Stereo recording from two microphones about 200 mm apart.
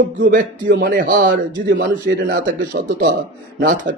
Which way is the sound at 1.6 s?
65° right (ahead or behind).